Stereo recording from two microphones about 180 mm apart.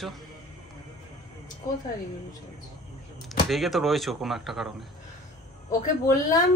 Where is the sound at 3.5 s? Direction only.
Centre (ahead or behind).